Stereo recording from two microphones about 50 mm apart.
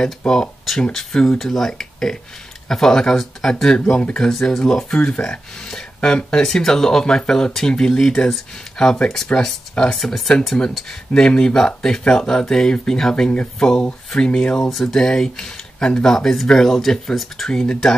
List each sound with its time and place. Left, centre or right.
0.0 s speech: centre
17.5 s speech: centre